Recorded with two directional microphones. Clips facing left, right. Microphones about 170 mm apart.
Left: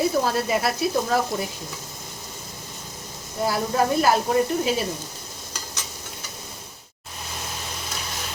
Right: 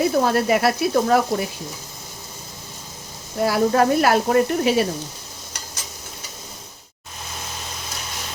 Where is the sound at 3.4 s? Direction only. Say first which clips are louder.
Right 5 dB; 75° right (ahead or behind).